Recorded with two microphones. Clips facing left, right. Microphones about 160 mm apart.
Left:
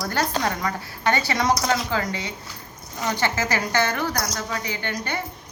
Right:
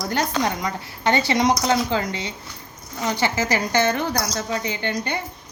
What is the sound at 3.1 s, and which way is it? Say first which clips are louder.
A woman's voice: right 2 dB; 15° right (ahead or behind).